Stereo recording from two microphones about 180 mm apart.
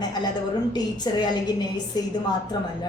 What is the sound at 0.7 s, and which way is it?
A woman's voice, 25° left (ahead or behind).